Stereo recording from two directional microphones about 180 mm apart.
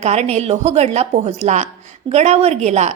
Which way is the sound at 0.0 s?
35° right (ahead or behind).